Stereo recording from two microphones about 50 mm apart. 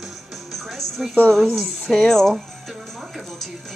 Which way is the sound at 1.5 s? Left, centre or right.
Centre.